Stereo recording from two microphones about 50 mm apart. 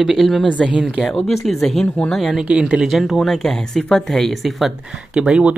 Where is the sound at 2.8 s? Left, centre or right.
Centre.